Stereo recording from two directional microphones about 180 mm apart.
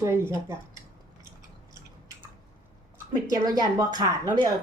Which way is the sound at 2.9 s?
20° right (ahead or behind).